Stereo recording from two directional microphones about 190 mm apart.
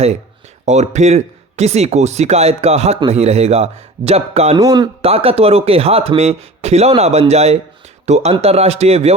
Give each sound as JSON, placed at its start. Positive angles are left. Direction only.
{"t": 0.6, "sound": "speech", "side_deg": -40}
{"t": 4.6, "sound": "speech", "side_deg": -20}